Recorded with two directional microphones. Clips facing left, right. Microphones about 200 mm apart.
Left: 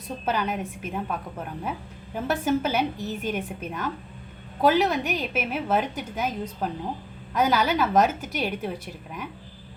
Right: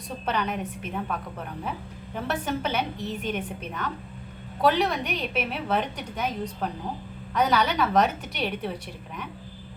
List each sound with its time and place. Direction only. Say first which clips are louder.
0.3 s a woman's voice: left 1 dB; 5° left (ahead or behind)
2.1 s a woman's voice: left 5 dB; 5° left (ahead or behind)
7.3 s a woman's voice: left 1 dB; 5° left (ahead or behind)